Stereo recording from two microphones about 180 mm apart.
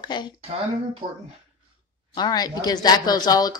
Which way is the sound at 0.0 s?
25° left (ahead or behind).